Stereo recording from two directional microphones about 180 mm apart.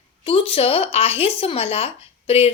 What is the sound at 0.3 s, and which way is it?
A woman's voice, 30° left (ahead or behind).